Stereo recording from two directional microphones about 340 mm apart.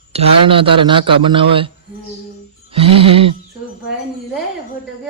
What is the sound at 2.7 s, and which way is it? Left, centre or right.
Speech, centre.